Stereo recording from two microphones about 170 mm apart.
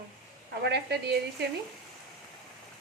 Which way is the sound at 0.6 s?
75° right (ahead or behind).